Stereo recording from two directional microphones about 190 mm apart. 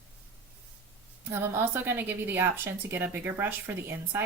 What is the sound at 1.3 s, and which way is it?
A woman's voice, 10° right (ahead or behind).